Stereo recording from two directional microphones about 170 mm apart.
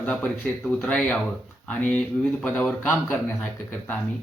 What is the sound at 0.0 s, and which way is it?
Speech, 10° left (ahead or behind).